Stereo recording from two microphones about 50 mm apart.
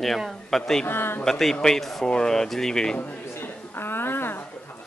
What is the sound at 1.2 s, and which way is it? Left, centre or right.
Speech, centre.